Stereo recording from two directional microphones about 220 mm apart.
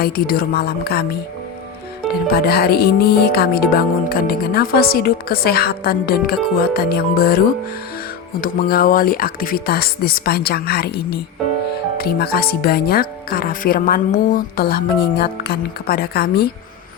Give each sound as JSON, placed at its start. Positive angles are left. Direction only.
{"t": 0.0, "sound": "speech", "side_deg": 45}
{"t": 2.2, "sound": "speech", "side_deg": 45}